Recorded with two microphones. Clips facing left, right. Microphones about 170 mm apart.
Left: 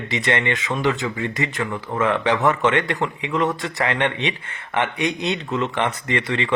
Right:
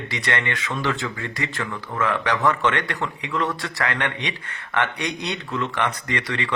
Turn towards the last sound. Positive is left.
turn(degrees=25)  # may be behind; listen again after turning